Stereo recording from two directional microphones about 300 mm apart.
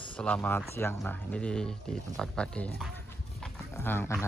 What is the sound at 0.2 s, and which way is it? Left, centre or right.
Speech, centre.